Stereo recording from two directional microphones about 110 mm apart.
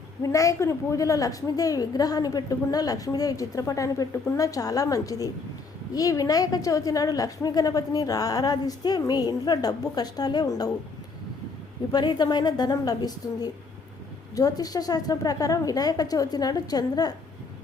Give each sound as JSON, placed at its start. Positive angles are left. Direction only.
{"t": 0.2, "sound": "a woman's voice", "side_deg": 30}
{"t": 11.9, "sound": "a woman's voice", "side_deg": 40}